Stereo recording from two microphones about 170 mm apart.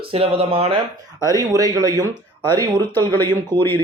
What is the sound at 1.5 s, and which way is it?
Speech, 20° right (ahead or behind).